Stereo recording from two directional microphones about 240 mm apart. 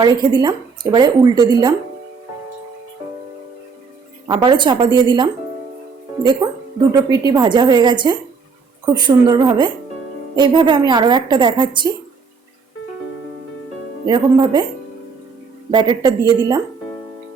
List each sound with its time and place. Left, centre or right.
0.0 s speech: centre
4.3 s a woman's voice: centre
6.4 s a woman's voice: centre
14.1 s speech: centre
15.7 s a woman's voice: centre